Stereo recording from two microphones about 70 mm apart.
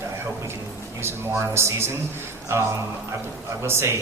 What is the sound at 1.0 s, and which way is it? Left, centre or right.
A man's voice, right.